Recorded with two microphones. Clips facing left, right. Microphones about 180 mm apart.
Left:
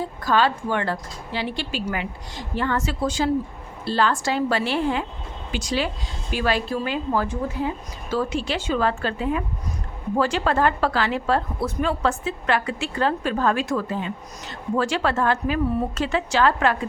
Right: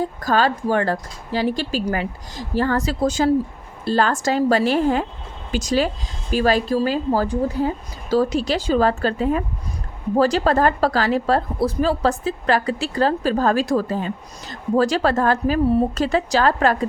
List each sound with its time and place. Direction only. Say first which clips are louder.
0.0 s a woman's voice: right 2 dB; 45° right (ahead or behind)